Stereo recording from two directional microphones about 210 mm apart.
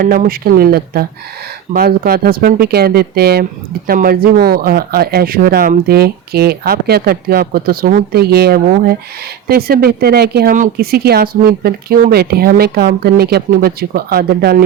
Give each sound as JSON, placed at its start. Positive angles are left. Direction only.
{"t": 0.0, "sound": "speech", "side_deg": -45}